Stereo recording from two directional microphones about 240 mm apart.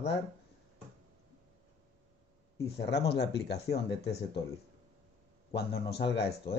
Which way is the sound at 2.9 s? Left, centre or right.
Left.